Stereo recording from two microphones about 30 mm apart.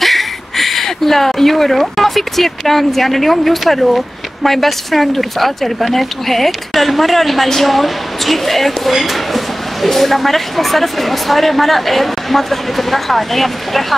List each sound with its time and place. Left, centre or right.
0.0 s speech: centre
8.9 s a sound: centre
9.8 s speech: centre